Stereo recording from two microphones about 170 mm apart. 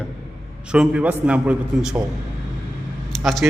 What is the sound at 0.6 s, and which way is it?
A man's voice, 5° right (ahead or behind).